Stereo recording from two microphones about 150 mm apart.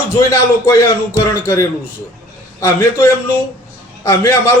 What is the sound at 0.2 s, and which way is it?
Speech, 20° left (ahead or behind).